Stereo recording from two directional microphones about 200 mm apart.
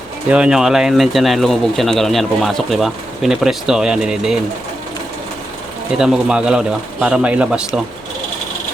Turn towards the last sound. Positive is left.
turn(degrees=-5)  # may be behind; listen again after turning